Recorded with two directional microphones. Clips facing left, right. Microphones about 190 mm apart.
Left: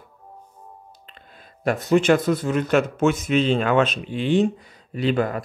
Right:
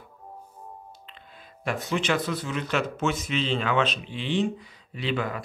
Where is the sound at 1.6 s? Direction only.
45° left (ahead or behind).